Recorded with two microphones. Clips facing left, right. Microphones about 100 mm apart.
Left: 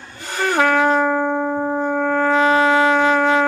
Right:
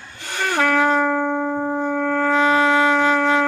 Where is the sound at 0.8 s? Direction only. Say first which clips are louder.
Left 1 dB; 10° left (ahead or behind).